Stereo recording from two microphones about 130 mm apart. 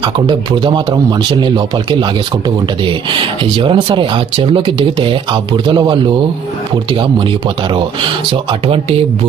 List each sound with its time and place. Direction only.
0.0 s speech: 35° right (ahead or behind)
8.3 s speech: 40° right (ahead or behind)